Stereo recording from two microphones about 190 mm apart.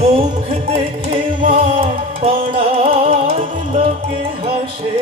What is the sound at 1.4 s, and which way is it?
Music, 30° right (ahead or behind).